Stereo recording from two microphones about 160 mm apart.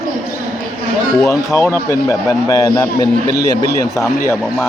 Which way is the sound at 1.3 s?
15° left (ahead or behind).